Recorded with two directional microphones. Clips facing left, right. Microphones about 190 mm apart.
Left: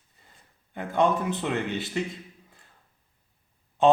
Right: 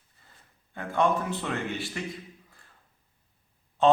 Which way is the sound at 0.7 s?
20° left (ahead or behind).